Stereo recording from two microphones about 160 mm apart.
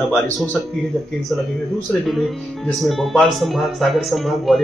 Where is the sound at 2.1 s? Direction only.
Centre (ahead or behind).